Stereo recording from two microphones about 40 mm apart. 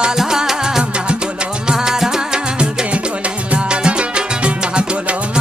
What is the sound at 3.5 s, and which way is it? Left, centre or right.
Music, right.